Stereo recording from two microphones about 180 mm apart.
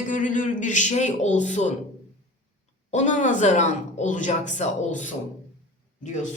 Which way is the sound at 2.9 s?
40° left (ahead or behind).